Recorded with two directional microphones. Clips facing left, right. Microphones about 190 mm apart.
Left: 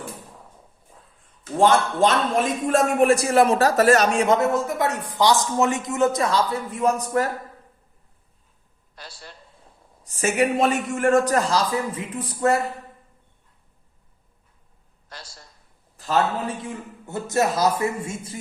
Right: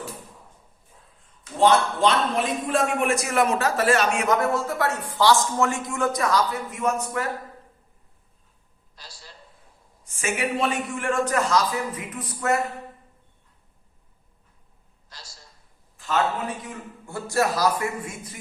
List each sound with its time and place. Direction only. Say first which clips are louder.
1.5 s a man's voice: left 1 dB; 45° left (ahead or behind)
9.0 s a man's voice: left 5 dB; 60° left (ahead or behind)
10.0 s a man's voice: left 6 dB; 40° left (ahead or behind)
16.0 s a sound: left 3 dB; 35° left (ahead or behind)
16.6 s speech: left 4 dB; 20° left (ahead or behind)